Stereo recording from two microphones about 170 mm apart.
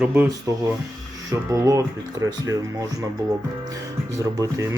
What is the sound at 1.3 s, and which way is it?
Speech, 20° right (ahead or behind).